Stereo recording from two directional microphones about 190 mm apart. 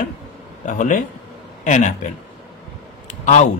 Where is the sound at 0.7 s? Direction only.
45° left (ahead or behind).